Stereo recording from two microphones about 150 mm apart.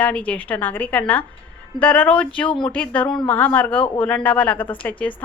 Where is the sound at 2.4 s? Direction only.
35° left (ahead or behind).